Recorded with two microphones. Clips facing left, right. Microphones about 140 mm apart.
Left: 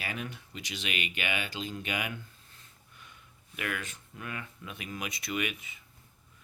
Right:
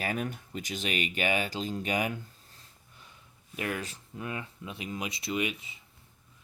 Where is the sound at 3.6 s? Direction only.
30° right (ahead or behind).